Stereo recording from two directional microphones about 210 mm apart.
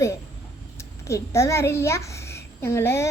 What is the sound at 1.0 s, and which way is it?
A child's voice, 15° left (ahead or behind).